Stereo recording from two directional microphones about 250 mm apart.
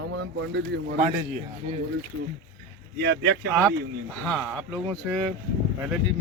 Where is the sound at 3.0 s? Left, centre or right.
Right.